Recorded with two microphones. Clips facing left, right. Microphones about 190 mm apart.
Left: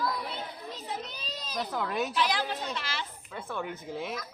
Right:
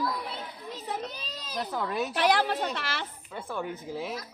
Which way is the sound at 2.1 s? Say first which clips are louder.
Right 5 dB; 65° right (ahead or behind).